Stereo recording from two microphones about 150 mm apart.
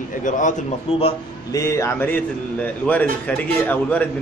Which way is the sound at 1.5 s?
20° left (ahead or behind).